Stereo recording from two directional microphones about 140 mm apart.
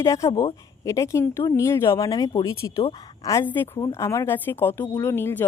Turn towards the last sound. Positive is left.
turn(degrees=15)  # may be behind; listen again after turning